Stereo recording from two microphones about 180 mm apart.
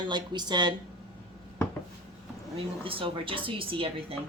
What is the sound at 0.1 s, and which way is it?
Speech, 25° right (ahead or behind).